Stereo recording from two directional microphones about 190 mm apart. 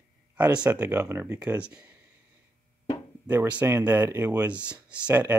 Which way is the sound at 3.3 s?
10° right (ahead or behind).